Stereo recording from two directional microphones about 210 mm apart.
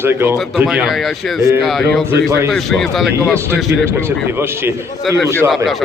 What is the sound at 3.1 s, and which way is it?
Speech, 15° right (ahead or behind).